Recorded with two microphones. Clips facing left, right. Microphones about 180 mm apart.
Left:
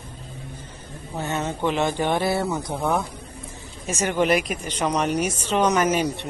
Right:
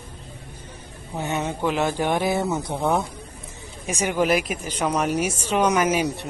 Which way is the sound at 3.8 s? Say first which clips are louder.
Even; 10° right (ahead or behind).